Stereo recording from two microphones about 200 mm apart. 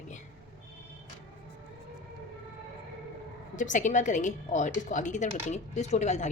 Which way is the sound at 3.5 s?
40° left (ahead or behind).